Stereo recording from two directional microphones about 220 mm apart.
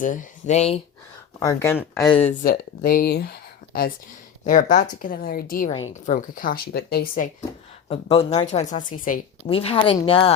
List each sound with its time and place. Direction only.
0.0 s speech: 35° left (ahead or behind)
1.4 s speech: 15° left (ahead or behind)
2.4 s speech: 40° left (ahead or behind)
7.9 s speech: 25° left (ahead or behind)
9.5 s speech: 25° left (ahead or behind)